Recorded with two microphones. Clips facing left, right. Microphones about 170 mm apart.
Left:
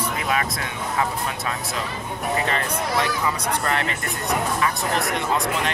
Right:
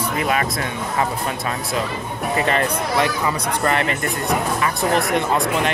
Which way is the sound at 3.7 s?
60° right (ahead or behind).